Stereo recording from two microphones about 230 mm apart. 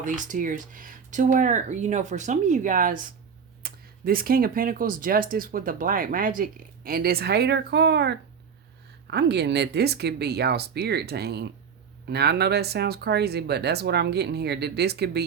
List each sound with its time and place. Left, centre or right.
0.0 s speech: right